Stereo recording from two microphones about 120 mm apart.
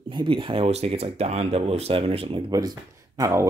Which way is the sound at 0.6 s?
60° right (ahead or behind).